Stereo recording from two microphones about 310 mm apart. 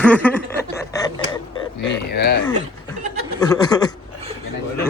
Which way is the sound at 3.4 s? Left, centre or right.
Centre.